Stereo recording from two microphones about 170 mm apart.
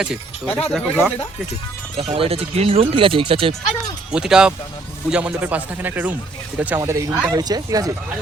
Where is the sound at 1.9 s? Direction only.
35° right (ahead or behind).